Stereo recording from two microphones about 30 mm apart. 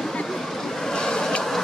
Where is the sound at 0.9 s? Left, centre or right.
Left.